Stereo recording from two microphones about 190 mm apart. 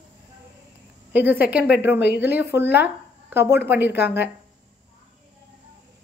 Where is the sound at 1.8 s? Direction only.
65° left (ahead or behind).